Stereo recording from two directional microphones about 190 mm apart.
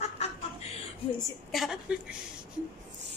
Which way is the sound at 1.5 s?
Centre (ahead or behind).